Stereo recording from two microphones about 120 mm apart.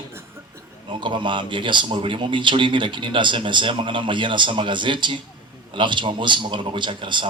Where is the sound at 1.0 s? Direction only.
40° right (ahead or behind).